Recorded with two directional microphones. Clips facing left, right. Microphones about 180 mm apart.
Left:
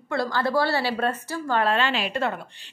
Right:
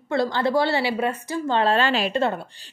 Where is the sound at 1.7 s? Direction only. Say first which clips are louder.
Right 3 dB; 40° right (ahead or behind).